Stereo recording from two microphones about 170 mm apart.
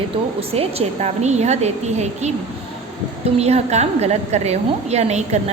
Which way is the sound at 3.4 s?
40° right (ahead or behind).